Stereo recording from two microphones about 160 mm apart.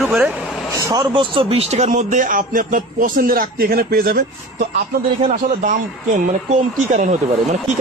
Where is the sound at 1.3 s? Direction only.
35° right (ahead or behind); by 4.2 s 70° right (ahead or behind).